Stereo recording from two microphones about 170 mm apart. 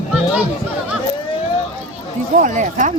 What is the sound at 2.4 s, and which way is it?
Speech, 50° right (ahead or behind).